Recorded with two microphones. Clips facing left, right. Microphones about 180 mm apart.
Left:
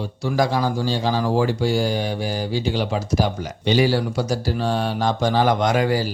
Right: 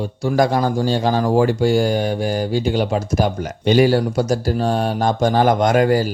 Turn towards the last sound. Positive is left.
turn(degrees=-50)  # may be behind; listen again after turning